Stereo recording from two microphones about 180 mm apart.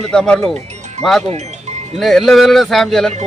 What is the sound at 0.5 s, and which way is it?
Music, 40° right (ahead or behind).